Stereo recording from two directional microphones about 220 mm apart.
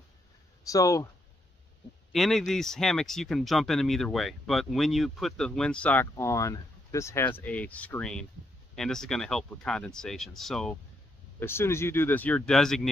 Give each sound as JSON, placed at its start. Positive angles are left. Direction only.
{"t": 0.7, "sound": "speech", "side_deg": 15}
{"t": 2.1, "sound": "speech", "side_deg": 0}